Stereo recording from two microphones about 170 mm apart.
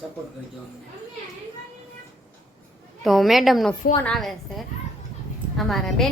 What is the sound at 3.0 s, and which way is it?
A woman's voice, centre (ahead or behind).